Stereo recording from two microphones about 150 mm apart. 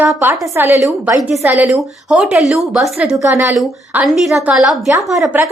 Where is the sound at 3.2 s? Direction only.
15° right (ahead or behind).